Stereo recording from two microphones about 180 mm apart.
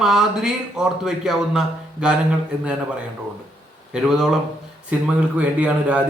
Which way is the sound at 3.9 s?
Centre (ahead or behind).